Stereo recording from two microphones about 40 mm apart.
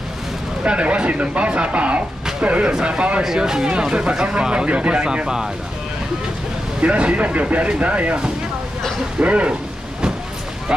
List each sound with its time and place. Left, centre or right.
0.7 s speech: right
6.8 s speech: right